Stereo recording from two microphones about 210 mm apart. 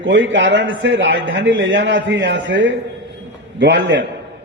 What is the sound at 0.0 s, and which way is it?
A man's voice, 60° right (ahead or behind).